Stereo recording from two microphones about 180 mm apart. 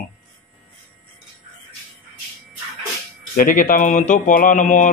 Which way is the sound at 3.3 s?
50° left (ahead or behind).